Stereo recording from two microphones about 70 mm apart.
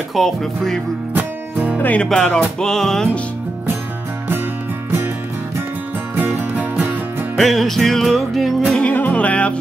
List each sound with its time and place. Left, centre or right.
0.1 s speech: centre
1.1 s music: right
1.8 s speech: left
2.0 s music: centre
7.3 s music: centre
8.7 s music: left